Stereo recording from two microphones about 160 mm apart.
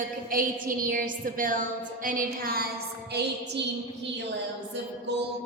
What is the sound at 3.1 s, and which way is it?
Music, 90° right.